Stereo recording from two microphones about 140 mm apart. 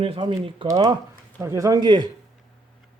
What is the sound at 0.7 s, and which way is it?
Speech, 25° right (ahead or behind).